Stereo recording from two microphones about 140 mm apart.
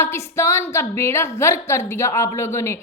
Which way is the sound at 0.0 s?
20° left (ahead or behind).